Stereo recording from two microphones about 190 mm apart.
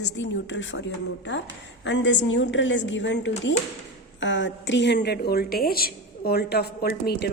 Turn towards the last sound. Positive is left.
turn(degrees=60)  # may be behind; listen again after turning